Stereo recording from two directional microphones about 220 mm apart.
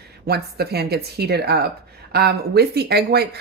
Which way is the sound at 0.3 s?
45° right (ahead or behind).